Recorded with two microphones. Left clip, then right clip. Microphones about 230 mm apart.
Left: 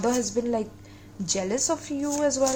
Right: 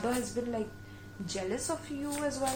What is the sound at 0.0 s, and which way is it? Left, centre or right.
A woman's voice, left.